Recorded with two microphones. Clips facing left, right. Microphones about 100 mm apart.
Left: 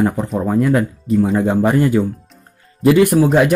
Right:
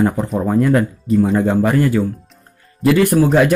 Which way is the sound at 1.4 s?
20° left (ahead or behind).